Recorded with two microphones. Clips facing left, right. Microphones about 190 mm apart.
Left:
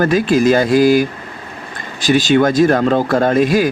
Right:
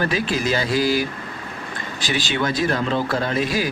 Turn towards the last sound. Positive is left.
turn(degrees=50)  # may be behind; listen again after turning